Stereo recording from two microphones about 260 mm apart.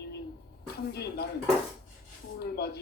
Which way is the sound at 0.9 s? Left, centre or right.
Left.